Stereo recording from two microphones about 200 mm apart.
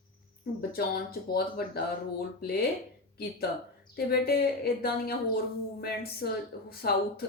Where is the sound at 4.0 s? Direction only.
50° left (ahead or behind).